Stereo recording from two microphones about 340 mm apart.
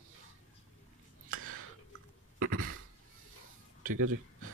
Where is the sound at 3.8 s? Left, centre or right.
Right.